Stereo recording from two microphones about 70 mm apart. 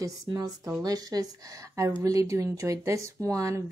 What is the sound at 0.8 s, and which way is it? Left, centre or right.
Speech, right.